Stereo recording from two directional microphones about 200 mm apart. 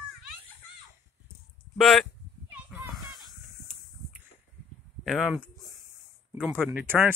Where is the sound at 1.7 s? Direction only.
Centre (ahead or behind).